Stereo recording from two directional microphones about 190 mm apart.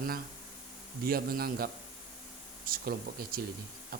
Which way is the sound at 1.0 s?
50° right (ahead or behind).